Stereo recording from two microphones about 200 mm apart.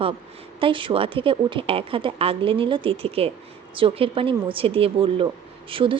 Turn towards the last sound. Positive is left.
turn(degrees=-25)  # may be behind; listen again after turning